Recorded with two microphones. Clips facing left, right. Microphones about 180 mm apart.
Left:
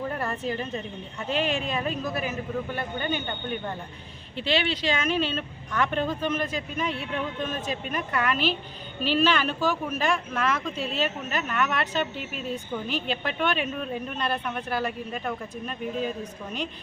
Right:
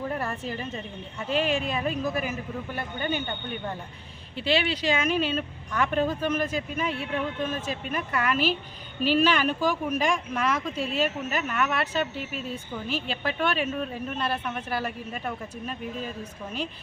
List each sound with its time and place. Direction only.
0.2 s a woman's voice: 10° right (ahead or behind)
4.4 s a woman's voice: 10° right (ahead or behind)